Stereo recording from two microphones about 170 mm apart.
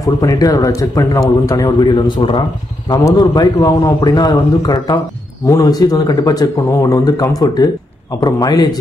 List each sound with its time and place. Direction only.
0.0 s a man's voice: 20° left (ahead or behind)